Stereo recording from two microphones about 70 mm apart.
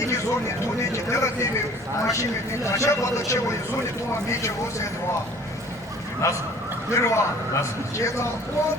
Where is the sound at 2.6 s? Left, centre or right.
Left.